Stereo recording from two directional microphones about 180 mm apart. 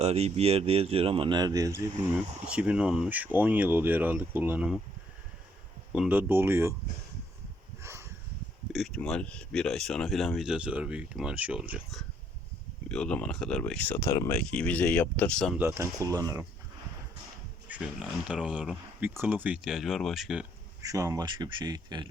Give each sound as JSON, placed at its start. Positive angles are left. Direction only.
{"t": 0.0, "sound": "speech", "side_deg": -35}
{"t": 2.5, "sound": "speech", "side_deg": -5}
{"t": 5.9, "sound": "speech", "side_deg": -10}
{"t": 7.8, "sound": "a sound", "side_deg": -15}
{"t": 8.7, "sound": "speech", "side_deg": 0}
{"t": 15.5, "sound": "speech", "side_deg": -15}
{"t": 17.7, "sound": "a sound", "side_deg": -10}
{"t": 18.3, "sound": "speech", "side_deg": -5}
{"t": 20.8, "sound": "speech", "side_deg": -20}